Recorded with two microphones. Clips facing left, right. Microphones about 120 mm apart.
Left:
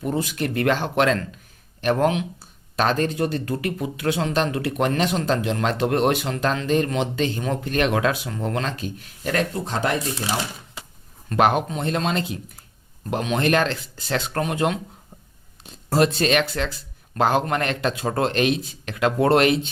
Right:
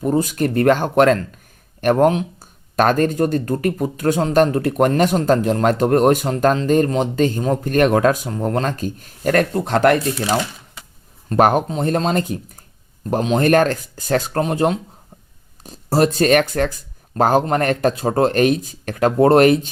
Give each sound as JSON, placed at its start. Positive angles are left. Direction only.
{"t": 0.0, "sound": "speech", "side_deg": -40}
{"t": 11.3, "sound": "speech", "side_deg": -40}